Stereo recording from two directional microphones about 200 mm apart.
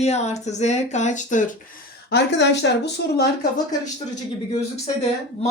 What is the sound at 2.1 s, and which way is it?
Speech, 60° left (ahead or behind).